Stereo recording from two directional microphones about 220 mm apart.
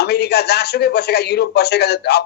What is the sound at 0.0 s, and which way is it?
Speech, 45° left (ahead or behind).